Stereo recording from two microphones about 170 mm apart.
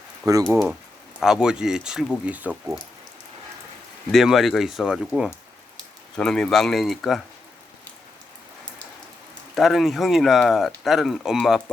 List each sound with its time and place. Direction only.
0.2 s speech: 20° right (ahead or behind)
1.2 s speech: 5° right (ahead or behind)
4.1 s speech: centre (ahead or behind)
9.6 s speech: centre (ahead or behind)